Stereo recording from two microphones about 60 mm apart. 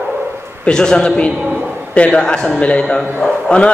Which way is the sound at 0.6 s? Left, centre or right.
Centre.